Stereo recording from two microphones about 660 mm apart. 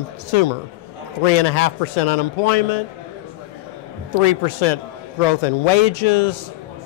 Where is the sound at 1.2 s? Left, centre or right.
Left.